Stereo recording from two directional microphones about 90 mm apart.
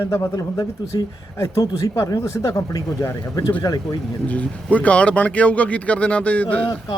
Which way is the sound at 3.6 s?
45° left (ahead or behind).